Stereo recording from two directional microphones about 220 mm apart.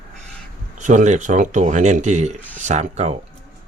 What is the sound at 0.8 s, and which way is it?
Speech, 35° right (ahead or behind).